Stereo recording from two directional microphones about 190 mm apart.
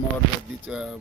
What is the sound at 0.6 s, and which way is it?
Music, 5° right (ahead or behind).